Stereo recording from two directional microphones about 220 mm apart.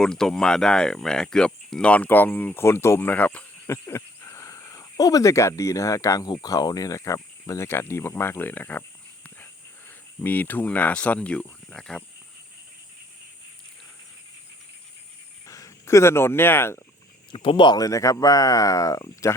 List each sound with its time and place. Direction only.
0.0 s speech: 5° left (ahead or behind)
10.2 s speech: 10° left (ahead or behind)
15.4 s speech: 15° left (ahead or behind)
17.3 s speech: 25° left (ahead or behind)